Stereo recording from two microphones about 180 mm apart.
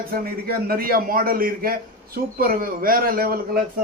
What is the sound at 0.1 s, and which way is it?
A man's voice, 55° right (ahead or behind).